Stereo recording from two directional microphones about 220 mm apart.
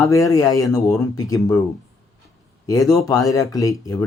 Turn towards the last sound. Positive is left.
turn(degrees=15)  # may be behind; listen again after turning